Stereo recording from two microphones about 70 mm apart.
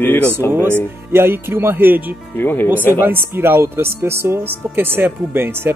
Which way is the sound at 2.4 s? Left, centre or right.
Left.